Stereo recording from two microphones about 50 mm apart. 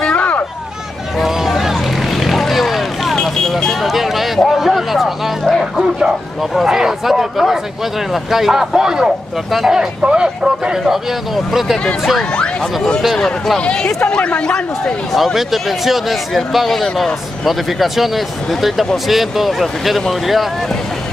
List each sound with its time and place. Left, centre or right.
0.1 s vehicle: left
1.1 s vehicle: centre
3.8 s a sound: centre
5.4 s a sound: centre
6.5 s speech: centre
10.8 s speech: centre
13.6 s a man's voice: centre
15.1 s speech: centre